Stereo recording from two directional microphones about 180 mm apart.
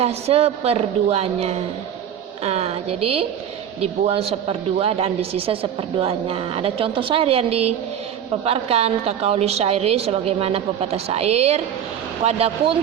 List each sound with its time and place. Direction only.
0.0 s a woman's voice: 35° right (ahead or behind)